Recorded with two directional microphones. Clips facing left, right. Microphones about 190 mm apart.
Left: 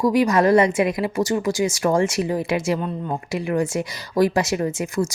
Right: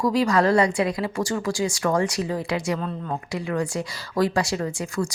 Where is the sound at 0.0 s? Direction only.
20° left (ahead or behind).